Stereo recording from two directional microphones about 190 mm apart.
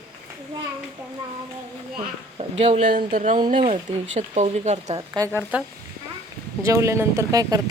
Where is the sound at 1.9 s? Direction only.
30° right (ahead or behind).